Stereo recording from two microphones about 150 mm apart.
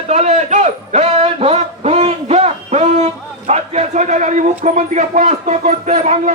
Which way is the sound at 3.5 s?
50° right (ahead or behind).